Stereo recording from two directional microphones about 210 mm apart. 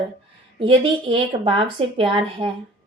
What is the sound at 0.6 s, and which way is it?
Speech, 25° right (ahead or behind).